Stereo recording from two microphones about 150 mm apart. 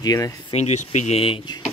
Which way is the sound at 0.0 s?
25° left (ahead or behind).